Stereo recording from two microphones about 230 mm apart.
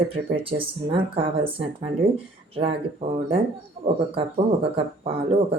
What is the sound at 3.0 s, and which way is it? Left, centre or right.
Speech, right.